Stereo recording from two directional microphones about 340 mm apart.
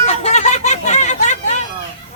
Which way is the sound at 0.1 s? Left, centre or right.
Centre.